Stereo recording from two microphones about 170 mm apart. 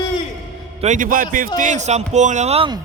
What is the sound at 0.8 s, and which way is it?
A man's voice, 45° right (ahead or behind).